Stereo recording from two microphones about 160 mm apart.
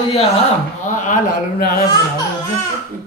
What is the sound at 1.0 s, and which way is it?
Speech, 60° left (ahead or behind).